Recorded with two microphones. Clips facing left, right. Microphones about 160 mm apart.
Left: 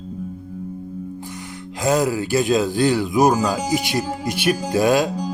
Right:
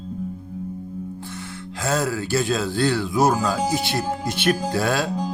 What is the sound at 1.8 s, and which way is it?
Speech, 15° left (ahead or behind).